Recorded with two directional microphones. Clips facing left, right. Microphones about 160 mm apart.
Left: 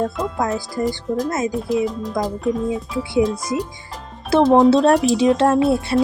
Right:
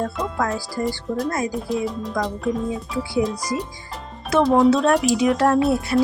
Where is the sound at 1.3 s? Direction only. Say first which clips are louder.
Left 2 dB; 20° left (ahead or behind).